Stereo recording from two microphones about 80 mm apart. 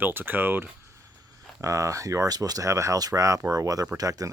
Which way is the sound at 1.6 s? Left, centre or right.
Right.